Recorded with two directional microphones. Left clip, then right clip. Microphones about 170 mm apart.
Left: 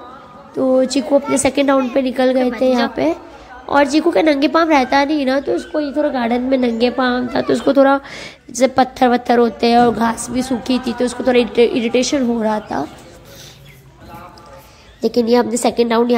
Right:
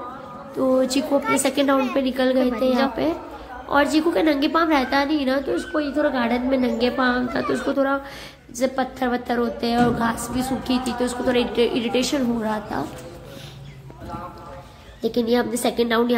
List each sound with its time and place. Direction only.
0.6 s a woman's voice: 30° left (ahead or behind)
15.0 s a woman's voice: 40° left (ahead or behind)